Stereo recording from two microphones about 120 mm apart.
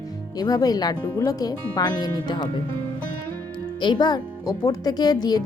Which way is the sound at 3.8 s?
35° left (ahead or behind).